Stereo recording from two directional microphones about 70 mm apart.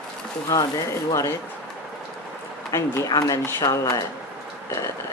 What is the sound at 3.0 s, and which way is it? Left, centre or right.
Speech, left.